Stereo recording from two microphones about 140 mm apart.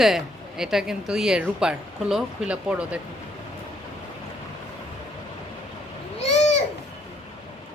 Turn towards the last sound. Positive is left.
turn(degrees=50)  # may be behind; listen again after turning